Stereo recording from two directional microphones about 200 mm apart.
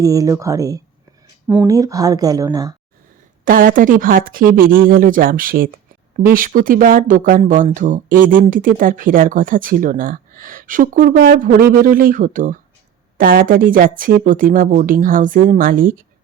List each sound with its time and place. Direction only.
0.0 s speech: 15° right (ahead or behind)
3.4 s speech: 45° right (ahead or behind)